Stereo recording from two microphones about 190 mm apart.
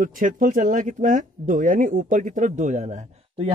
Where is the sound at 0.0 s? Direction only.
45° right (ahead or behind).